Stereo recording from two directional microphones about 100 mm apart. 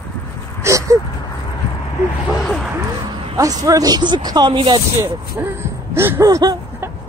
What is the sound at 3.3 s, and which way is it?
Speech, 35° right (ahead or behind).